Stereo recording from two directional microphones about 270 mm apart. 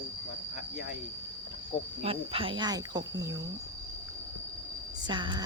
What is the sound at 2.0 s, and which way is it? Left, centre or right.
Speech, right.